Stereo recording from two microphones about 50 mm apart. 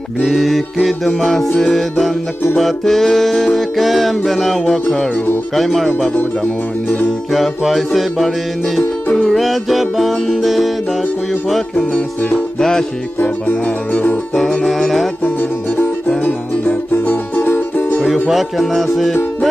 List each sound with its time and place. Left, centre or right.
0.2 s music: centre
7.3 s music: centre
13.2 s music: left
14.3 s music: centre
16.3 s music: left
17.4 s music: left
18.6 s music: centre